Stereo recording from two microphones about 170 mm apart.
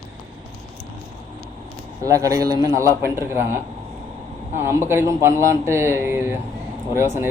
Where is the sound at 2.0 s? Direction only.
20° right (ahead or behind).